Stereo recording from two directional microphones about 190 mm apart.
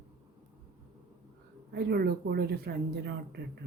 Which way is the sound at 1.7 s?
60° right (ahead or behind).